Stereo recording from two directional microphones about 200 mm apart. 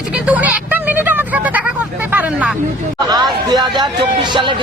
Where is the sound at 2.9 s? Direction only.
20° right (ahead or behind).